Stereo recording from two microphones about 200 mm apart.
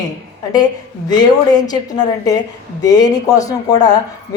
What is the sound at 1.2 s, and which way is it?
Speech, 20° left (ahead or behind).